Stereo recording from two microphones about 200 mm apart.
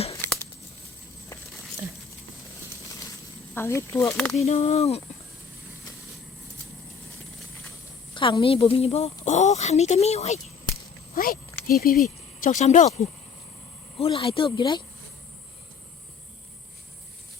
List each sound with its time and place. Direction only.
3.5 s speech: 10° left (ahead or behind)
4.4 s a woman's voice: 30° left (ahead or behind)
8.1 s a woman's voice: 25° left (ahead or behind)
11.1 s speech: 45° left (ahead or behind)
12.4 s a woman's voice: 40° left (ahead or behind); by 14.8 s 20° left (ahead or behind)